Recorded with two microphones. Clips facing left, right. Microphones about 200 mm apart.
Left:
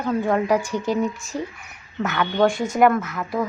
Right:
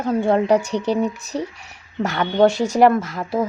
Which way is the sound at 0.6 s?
70° right (ahead or behind).